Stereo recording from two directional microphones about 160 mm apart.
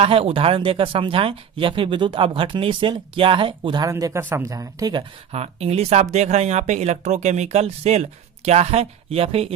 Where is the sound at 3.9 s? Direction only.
15° right (ahead or behind).